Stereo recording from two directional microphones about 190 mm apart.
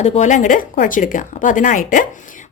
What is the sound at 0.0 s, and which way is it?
Speech, 40° left (ahead or behind).